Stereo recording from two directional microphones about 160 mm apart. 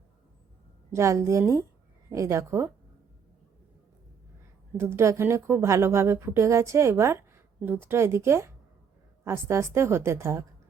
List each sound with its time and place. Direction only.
0.9 s a woman's voice: 20° right (ahead or behind)
4.8 s a woman's voice: 15° right (ahead or behind)